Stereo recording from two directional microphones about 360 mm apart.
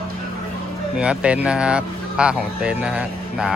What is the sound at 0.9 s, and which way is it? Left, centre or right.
Speech, centre.